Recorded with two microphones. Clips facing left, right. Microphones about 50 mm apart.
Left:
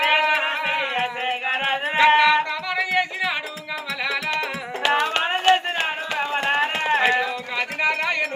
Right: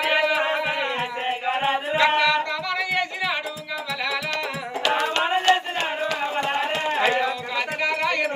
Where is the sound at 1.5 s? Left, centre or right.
Left.